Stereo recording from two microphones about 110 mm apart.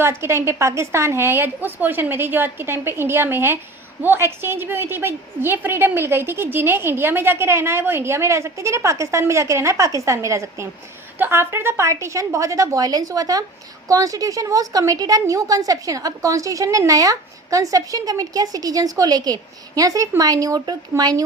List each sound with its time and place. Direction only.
0.0 s a woman's voice: 25° right (ahead or behind)